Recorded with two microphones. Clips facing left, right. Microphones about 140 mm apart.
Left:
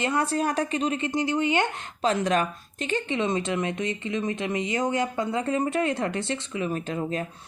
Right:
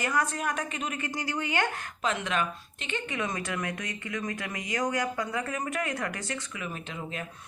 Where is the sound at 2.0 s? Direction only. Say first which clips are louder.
Left 6 dB; 35° left (ahead or behind).